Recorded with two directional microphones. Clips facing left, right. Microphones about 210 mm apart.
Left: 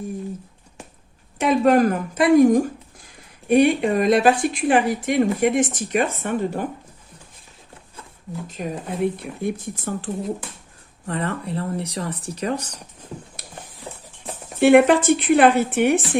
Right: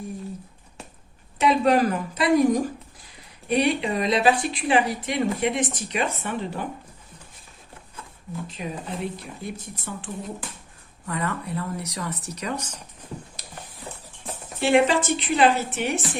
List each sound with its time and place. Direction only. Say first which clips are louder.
1.4 s speech: left 3 dB; 50° left (ahead or behind)
8.4 s speech: left 6 dB; 50° left (ahead or behind)
11.0 s speech: left 3 dB; 30° left (ahead or behind)
13.4 s a sound: left 2 dB; 55° left (ahead or behind)
14.6 s speech: left 6 dB; 55° left (ahead or behind)